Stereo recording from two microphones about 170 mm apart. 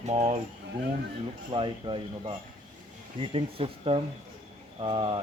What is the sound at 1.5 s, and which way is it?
Speech, 30° right (ahead or behind).